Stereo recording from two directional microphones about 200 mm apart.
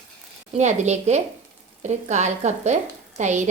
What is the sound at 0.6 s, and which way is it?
A woman's voice, 35° right (ahead or behind).